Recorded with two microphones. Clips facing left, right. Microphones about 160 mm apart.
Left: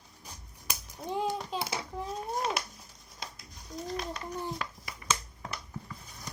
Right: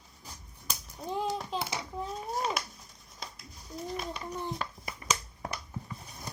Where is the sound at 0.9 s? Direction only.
Centre (ahead or behind).